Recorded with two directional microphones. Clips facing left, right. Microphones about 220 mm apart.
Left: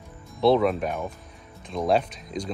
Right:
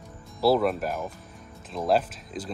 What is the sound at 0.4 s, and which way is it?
Speech, 5° right (ahead or behind).